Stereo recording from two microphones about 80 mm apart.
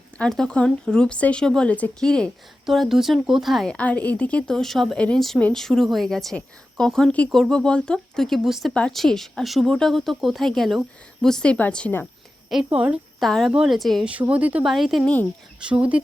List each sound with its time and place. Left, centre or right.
0.2 s speech: centre
2.6 s speech: centre
3.7 s speech: centre
4.9 s speech: centre
5.5 s speech: centre
12.7 s speech: centre
13.1 s speech: centre
14.0 s speech: centre
14.6 s speech: centre
15.0 s speech: centre
15.6 s speech: centre